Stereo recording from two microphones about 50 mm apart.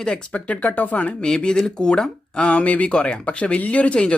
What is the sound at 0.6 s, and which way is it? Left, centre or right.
Speech, left.